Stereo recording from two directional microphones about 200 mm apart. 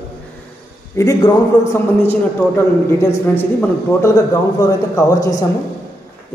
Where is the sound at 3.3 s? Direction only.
10° left (ahead or behind).